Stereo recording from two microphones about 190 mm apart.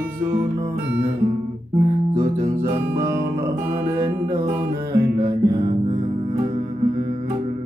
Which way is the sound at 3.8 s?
15° right (ahead or behind).